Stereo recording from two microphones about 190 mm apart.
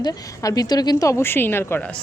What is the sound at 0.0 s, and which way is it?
A woman's voice, 20° left (ahead or behind).